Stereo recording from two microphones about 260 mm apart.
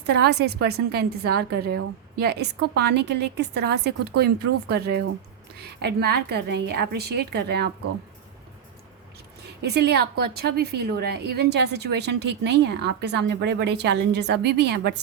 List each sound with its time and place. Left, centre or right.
0.0 s a woman's voice: right
9.6 s a woman's voice: right